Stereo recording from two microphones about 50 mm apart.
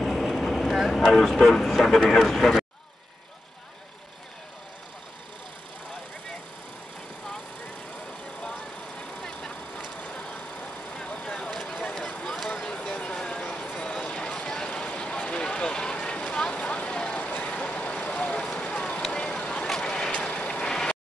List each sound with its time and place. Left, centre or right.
0.0 s vehicle: centre
1.1 s speech: centre
8.4 s vehicle: centre
11.2 s a sound: centre
12.6 s vehicle: left
20.2 s a sound: left